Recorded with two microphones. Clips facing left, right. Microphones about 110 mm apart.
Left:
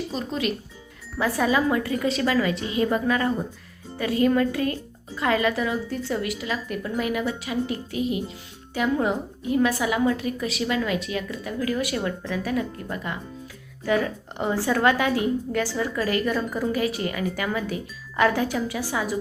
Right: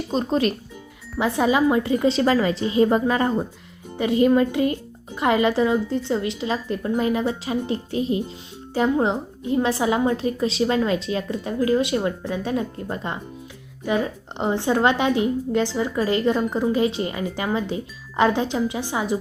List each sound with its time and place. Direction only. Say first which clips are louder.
0.1 s speech: right 10 dB; 35° right (ahead or behind)
1.2 s a woman's voice: right 3 dB; 20° right (ahead or behind)